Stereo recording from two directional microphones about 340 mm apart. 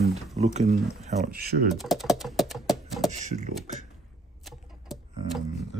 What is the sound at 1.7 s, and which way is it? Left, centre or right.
Speech, centre.